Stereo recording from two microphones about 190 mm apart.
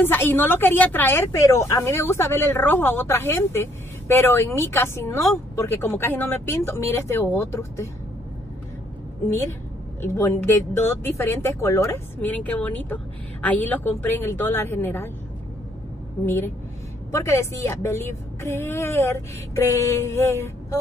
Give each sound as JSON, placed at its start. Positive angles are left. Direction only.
{"t": 0.0, "sound": "speech", "side_deg": 10}
{"t": 10.0, "sound": "speech", "side_deg": 15}
{"t": 16.3, "sound": "speech", "side_deg": 10}